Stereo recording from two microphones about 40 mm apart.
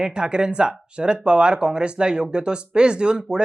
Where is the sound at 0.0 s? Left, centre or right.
Right.